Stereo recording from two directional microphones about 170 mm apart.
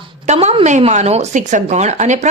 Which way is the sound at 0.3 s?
35° right (ahead or behind).